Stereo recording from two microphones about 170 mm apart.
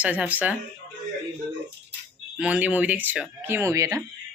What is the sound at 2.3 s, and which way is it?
Speech, 5° right (ahead or behind).